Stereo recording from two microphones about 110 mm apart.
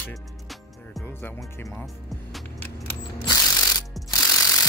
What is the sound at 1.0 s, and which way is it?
Speech, 20° left (ahead or behind).